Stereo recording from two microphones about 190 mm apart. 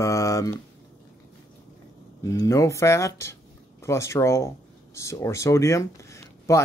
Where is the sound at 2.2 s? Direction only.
15° left (ahead or behind).